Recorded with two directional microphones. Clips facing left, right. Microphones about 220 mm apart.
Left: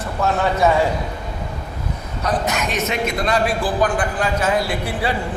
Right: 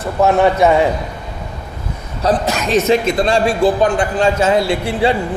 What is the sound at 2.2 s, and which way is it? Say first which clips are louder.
A man's voice: right 5 dB; 30° right (ahead or behind).